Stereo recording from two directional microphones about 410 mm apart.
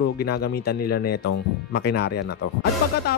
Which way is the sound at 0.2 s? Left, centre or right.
Left.